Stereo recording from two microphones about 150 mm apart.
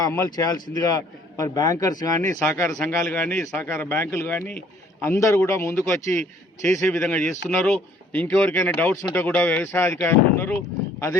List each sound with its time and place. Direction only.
0.0 s a man's voice: 20° left (ahead or behind)
2.7 s a man's voice: 5° left (ahead or behind)